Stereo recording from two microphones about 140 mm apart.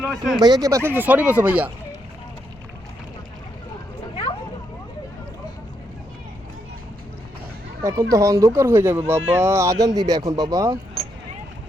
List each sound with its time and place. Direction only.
0.0 s speech: centre (ahead or behind)
0.3 s speech: 30° right (ahead or behind); by 1.7 s 10° right (ahead or behind)
7.8 s speech: 20° right (ahead or behind)